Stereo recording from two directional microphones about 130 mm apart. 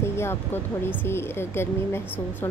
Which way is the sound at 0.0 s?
20° left (ahead or behind).